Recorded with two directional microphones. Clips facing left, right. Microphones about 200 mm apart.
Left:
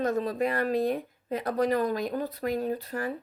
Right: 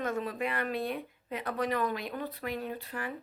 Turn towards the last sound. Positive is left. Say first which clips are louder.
# left 7 dB
turn(degrees=40)  # may be behind; listen again after turning